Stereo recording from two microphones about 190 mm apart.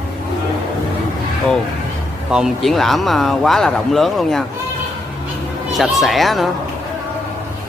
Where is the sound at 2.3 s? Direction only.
Centre (ahead or behind).